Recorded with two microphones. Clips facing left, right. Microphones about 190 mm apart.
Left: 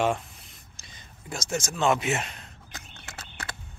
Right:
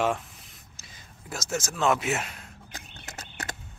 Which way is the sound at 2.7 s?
40° right (ahead or behind).